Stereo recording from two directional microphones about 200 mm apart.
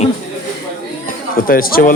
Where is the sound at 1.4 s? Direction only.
45° left (ahead or behind).